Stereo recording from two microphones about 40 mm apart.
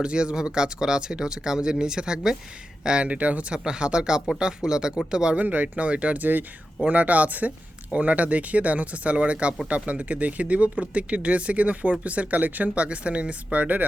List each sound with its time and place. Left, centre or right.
0.0 s speech: right
2.8 s speech: right
3.5 s speech: right
5.4 s speech: right
6.1 s speech: right
6.8 s speech: right
12.8 s speech: right